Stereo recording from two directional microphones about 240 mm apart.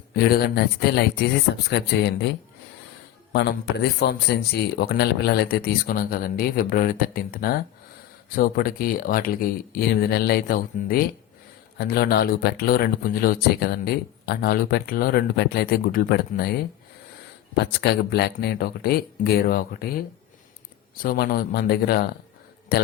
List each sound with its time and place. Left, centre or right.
0.1 s speech: left
4.0 s speech: left